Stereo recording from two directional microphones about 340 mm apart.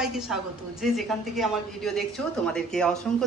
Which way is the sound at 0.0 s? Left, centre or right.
Centre.